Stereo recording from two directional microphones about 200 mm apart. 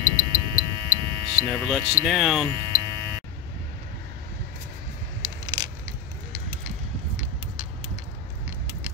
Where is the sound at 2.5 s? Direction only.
20° right (ahead or behind).